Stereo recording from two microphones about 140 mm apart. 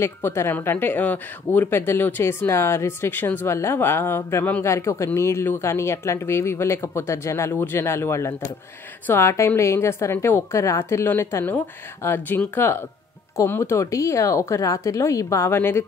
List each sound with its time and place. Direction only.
0.0 s speech: 20° left (ahead or behind)